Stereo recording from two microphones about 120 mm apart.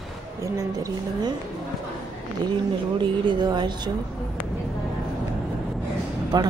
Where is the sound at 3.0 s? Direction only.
40° right (ahead or behind).